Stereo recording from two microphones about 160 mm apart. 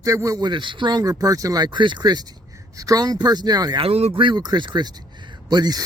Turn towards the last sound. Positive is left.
turn(degrees=-25)  # may be behind; listen again after turning